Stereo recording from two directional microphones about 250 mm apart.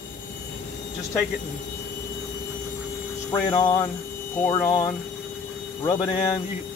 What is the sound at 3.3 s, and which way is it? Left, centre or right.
Speech, centre.